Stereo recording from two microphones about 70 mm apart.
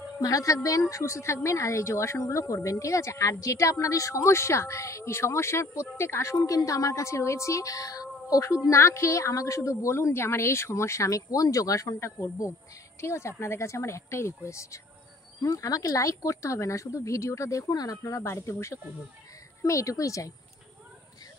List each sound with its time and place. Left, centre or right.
0.2 s speech: left
6.4 s speech: left